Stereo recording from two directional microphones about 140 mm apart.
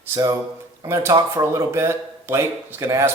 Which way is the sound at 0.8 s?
20° right (ahead or behind).